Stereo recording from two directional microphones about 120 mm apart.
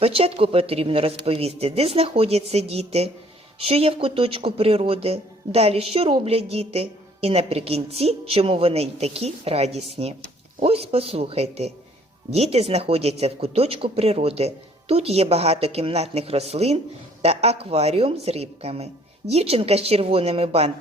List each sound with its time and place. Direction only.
0.0 s speech: 55° right (ahead or behind)